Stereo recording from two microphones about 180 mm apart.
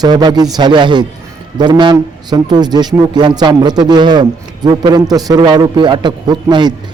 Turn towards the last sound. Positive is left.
turn(degrees=-25)  # may be behind; listen again after turning